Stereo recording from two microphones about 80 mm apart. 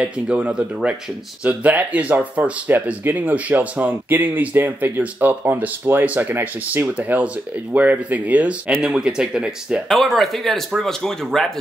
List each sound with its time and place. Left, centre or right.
0.0 s speech: centre
9.9 s speech: centre